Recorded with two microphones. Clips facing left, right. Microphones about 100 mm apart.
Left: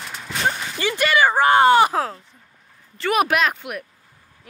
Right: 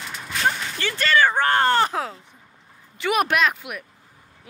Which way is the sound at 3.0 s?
Centre (ahead or behind).